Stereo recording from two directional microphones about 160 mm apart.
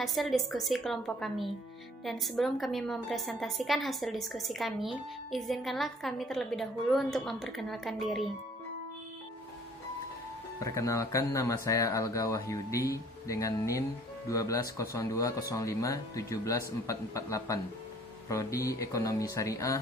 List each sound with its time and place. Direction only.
0.0 s a woman's voice: centre (ahead or behind)
10.6 s speech: 20° left (ahead or behind)